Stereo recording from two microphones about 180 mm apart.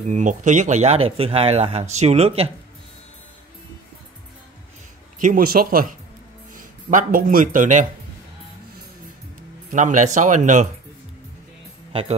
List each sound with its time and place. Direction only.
0.0 s speech: 40° right (ahead or behind)
5.2 s speech: 50° right (ahead or behind)
9.7 s speech: 45° right (ahead or behind)
11.9 s speech: 30° right (ahead or behind)